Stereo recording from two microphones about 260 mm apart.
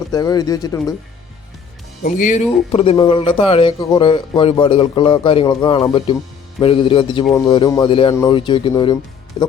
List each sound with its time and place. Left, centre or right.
0.1 s speech: centre
2.0 s speech: left